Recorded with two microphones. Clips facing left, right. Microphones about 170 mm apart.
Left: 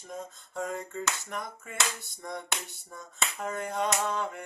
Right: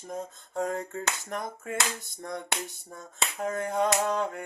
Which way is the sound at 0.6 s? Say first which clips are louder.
Right 2 dB; 50° right (ahead or behind).